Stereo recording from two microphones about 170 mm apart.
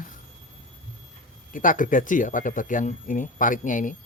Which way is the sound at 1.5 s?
50° left (ahead or behind).